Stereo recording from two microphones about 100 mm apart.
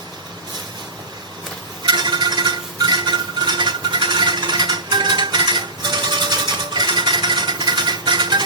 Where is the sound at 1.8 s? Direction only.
45° right (ahead or behind).